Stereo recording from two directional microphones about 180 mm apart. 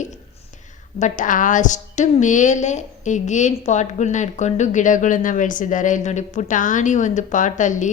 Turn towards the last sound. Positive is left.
turn(degrees=45)  # may be behind; listen again after turning